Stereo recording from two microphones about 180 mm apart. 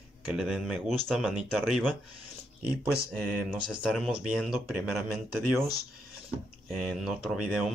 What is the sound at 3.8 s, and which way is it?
Speech, centre (ahead or behind).